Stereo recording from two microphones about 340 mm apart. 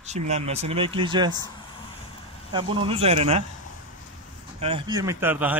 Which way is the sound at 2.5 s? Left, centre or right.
Centre.